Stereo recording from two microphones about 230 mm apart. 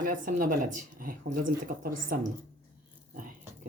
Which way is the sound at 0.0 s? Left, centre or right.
Right.